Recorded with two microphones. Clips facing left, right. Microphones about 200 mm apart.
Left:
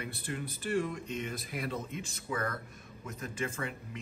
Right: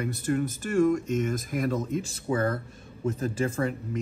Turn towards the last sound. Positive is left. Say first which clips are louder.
# right 10 dB
turn(degrees=-40)  # may be behind; listen again after turning